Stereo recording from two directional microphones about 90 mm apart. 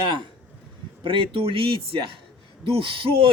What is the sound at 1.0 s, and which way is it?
Speech, 70° right (ahead or behind).